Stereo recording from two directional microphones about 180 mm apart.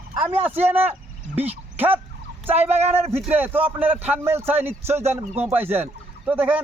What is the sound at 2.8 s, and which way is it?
Speech, 35° right (ahead or behind).